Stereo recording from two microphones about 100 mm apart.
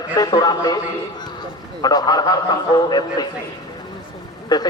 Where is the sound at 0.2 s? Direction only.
40° left (ahead or behind).